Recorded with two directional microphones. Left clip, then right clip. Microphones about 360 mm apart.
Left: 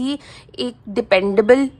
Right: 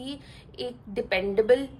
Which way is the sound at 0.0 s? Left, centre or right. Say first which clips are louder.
Left 13 dB; centre.